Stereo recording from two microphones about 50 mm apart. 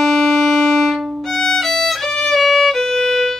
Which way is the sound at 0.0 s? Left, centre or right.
Centre.